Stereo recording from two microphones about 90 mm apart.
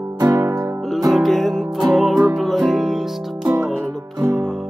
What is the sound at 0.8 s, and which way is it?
Music, centre (ahead or behind).